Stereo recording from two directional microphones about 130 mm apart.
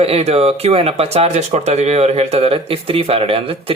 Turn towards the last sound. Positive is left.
turn(degrees=-45)  # may be behind; listen again after turning